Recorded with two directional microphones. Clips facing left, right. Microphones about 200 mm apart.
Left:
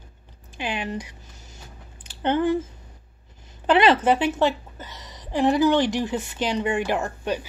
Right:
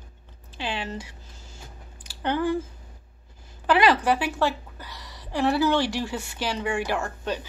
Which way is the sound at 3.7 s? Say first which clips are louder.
Left 3 dB; 25° left (ahead or behind).